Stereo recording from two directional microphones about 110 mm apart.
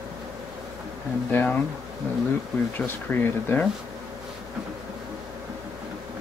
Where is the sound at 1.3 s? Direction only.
20° left (ahead or behind).